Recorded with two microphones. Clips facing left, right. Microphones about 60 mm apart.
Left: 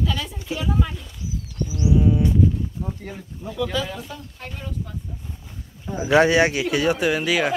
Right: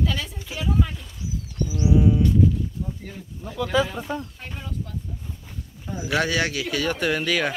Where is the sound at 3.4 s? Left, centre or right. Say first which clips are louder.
Right 3 dB; centre.